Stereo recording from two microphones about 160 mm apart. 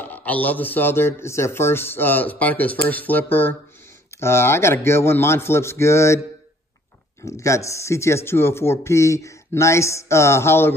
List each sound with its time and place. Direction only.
0.0 s a man's voice: 10° left (ahead or behind)
7.2 s a man's voice: 20° left (ahead or behind)